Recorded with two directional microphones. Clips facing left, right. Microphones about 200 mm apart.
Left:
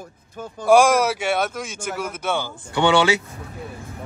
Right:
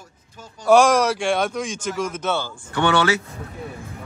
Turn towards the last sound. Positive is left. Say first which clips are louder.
# left 2 dB
turn(degrees=15)  # may be behind; listen again after turning